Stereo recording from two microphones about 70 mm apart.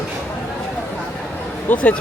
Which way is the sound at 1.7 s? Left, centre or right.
Left.